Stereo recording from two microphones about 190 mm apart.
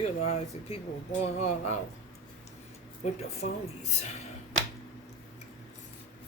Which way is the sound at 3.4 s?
45° left (ahead or behind).